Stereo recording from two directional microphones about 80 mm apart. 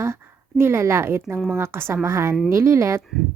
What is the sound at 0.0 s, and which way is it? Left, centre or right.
A woman's voice, right.